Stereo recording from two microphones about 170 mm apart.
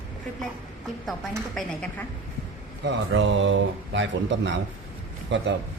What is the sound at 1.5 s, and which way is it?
Speech, 5° left (ahead or behind).